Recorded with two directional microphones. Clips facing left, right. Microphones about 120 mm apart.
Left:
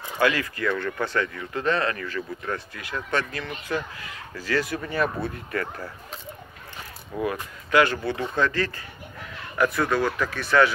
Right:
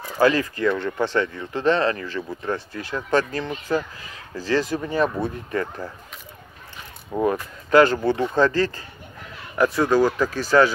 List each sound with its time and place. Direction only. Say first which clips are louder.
0.2 s speech: right 5 dB; 35° right (ahead or behind)
0.7 s speech: right 3 dB; 20° right (ahead or behind); by 3.8 s 35° right (ahead or behind)
4.7 s speech: right 4 dB; 20° right (ahead or behind)
7.1 s speech: right 5 dB; 25° right (ahead or behind)
7.7 s speech: right 5 dB; 40° right (ahead or behind)